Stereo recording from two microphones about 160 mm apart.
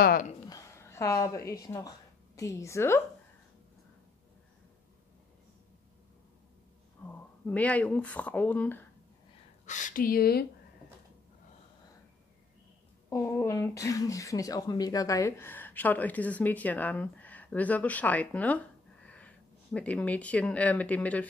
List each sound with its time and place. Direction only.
0.0 s speech: 65° left (ahead or behind)
0.5 s speech: 20° left (ahead or behind)
7.1 s speech: 10° left (ahead or behind)
9.7 s speech: 55° left (ahead or behind); by 10.4 s 70° left (ahead or behind)
13.1 s speech: 20° left (ahead or behind)